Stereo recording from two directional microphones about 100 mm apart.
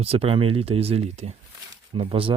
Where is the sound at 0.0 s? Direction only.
75° right (ahead or behind).